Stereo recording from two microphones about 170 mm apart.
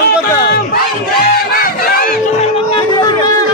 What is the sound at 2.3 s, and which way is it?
Music, 35° left (ahead or behind).